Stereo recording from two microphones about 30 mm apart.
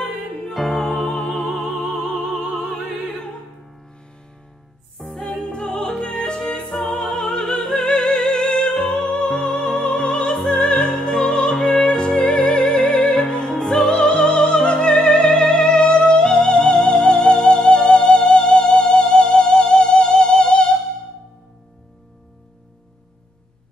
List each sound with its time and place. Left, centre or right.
0.5 s music: centre
5.0 s music: centre
5.5 s music: left
7.0 s opera: left
7.8 s music: left
13.3 s opera: left
13.6 s music: centre